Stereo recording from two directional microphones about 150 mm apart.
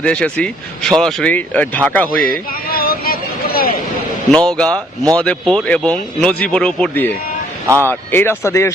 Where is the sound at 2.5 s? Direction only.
80° left.